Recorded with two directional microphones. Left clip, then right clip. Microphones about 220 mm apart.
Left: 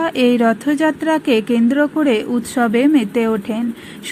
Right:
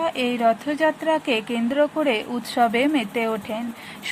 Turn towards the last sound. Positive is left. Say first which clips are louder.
# left 6 dB
turn(degrees=10)  # may be behind; listen again after turning